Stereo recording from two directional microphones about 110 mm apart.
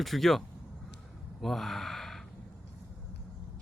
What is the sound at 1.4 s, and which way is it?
Gasp, centre (ahead or behind).